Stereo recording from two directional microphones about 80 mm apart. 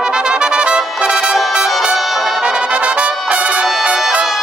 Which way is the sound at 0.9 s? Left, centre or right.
Centre.